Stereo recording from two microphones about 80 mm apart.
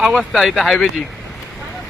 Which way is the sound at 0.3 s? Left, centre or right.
Centre.